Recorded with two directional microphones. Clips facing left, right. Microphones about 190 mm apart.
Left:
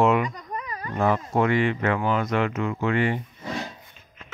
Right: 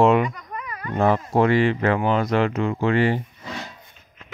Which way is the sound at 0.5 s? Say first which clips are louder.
Even; 30° left (ahead or behind).